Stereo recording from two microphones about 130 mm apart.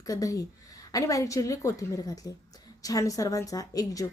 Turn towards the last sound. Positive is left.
turn(degrees=25)  # may be behind; listen again after turning